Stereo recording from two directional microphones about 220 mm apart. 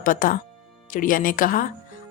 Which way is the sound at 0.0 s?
40° left (ahead or behind).